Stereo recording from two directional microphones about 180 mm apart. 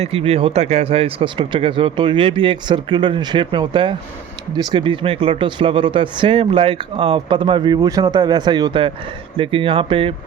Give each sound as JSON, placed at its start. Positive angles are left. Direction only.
{"t": 0.0, "sound": "speech", "side_deg": -35}